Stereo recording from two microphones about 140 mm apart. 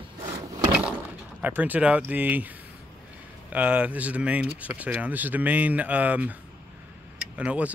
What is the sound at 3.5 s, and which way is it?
Speech, 10° right (ahead or behind).